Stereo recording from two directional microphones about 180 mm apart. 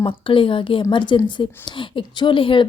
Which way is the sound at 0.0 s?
30° left (ahead or behind).